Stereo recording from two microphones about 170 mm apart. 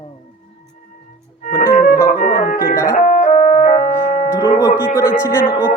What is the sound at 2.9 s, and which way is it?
Keyboard, 45° left (ahead or behind).